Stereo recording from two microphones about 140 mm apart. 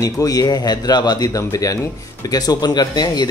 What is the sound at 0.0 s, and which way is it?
A man's voice, 25° left (ahead or behind).